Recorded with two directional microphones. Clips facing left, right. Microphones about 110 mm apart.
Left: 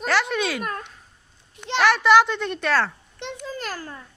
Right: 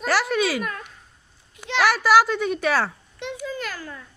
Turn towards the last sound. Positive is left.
turn(degrees=35)  # may be behind; listen again after turning